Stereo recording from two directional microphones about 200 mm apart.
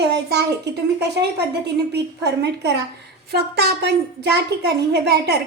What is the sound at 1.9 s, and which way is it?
A woman's voice, 55° right (ahead or behind).